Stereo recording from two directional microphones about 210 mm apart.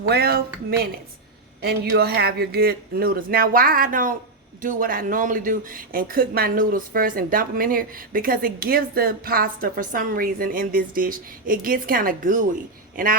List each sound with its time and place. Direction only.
0.1 s speech: 50° right (ahead or behind)